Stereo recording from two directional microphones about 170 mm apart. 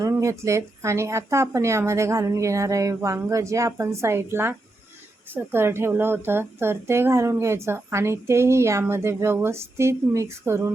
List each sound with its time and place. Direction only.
0.0 s a woman's voice: 20° right (ahead or behind)